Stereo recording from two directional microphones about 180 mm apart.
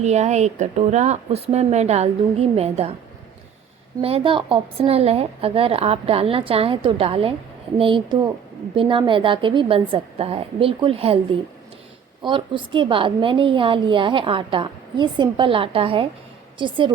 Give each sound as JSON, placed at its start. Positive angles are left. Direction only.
{"t": 0.0, "sound": "a woman's voice", "side_deg": -40}
{"t": 4.0, "sound": "a woman's voice", "side_deg": -30}
{"t": 12.2, "sound": "a woman's voice", "side_deg": -25}